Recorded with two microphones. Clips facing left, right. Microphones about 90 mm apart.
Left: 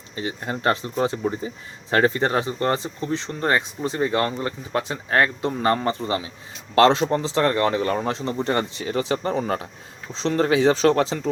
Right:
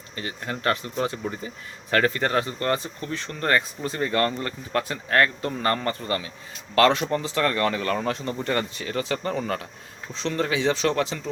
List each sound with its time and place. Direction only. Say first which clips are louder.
0.2 s speech: left 4 dB; 25° left (ahead or behind)